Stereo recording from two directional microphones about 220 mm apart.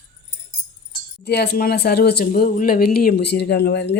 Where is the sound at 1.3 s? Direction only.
50° left (ahead or behind).